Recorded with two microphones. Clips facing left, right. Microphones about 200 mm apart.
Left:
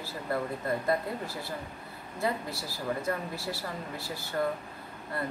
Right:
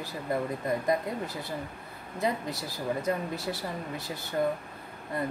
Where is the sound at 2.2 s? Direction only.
20° right (ahead or behind).